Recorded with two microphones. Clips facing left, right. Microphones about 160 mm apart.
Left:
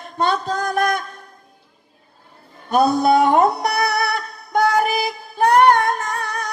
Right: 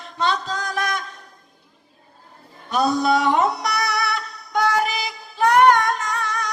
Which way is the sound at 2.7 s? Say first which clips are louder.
Left 4 dB; 55° left (ahead or behind).